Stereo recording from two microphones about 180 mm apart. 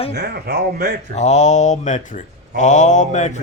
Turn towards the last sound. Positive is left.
turn(degrees=40)  # may be behind; listen again after turning